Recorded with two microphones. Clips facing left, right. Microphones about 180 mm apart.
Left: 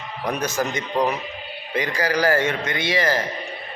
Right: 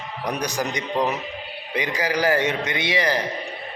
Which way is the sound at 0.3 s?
15° right (ahead or behind).